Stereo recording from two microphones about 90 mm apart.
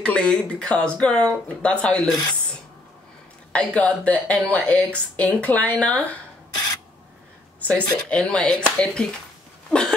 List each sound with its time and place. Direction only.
0.0 s speech: 10° left (ahead or behind)
3.5 s speech: 15° left (ahead or behind)
7.6 s speech: 15° left (ahead or behind)
9.7 s a sound: 10° left (ahead or behind)